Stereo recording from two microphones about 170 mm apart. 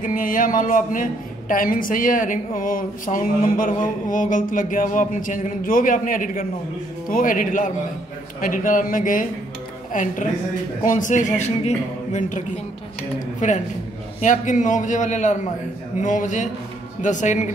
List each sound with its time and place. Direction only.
0.0 s a woman's voice: 50° left (ahead or behind)